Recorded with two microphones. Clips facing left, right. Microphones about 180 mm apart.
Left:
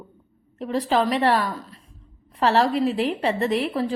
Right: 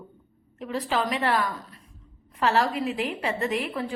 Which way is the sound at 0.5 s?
35° left (ahead or behind).